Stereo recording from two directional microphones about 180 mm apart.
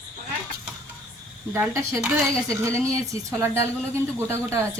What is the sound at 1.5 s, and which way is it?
A woman's voice, 15° right (ahead or behind).